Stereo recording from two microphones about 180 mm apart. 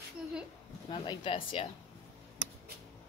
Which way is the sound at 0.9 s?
30° left (ahead or behind).